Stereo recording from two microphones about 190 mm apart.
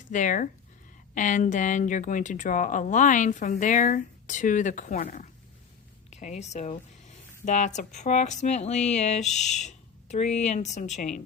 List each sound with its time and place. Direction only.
0.0 s speech: 40° left (ahead or behind)